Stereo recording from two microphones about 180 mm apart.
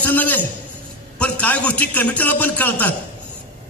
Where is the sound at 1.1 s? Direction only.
10° left (ahead or behind).